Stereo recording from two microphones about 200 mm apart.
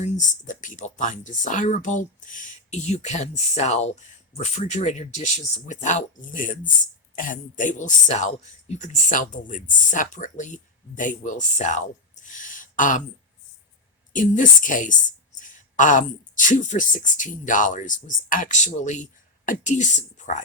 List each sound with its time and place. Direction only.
0.0 s speech: 40° left (ahead or behind)
12.2 s a sound: 40° left (ahead or behind)
14.1 s speech: 40° left (ahead or behind)